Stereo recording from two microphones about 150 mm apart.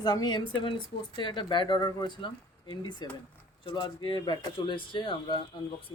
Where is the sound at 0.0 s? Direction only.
30° left (ahead or behind).